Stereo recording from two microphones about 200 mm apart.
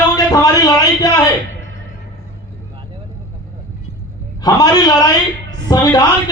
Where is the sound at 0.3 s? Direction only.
20° left (ahead or behind).